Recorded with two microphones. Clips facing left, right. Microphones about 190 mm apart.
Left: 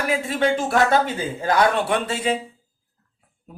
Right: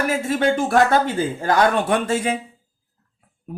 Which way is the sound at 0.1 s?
45° right (ahead or behind).